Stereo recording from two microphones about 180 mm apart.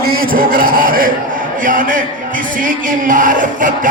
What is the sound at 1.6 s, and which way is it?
Music, 50° right (ahead or behind).